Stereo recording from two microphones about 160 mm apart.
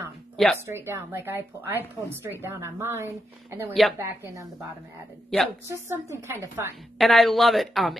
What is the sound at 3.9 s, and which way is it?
Speech, 15° right (ahead or behind).